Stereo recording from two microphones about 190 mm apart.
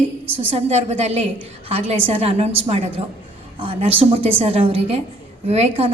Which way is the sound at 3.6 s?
30° right (ahead or behind).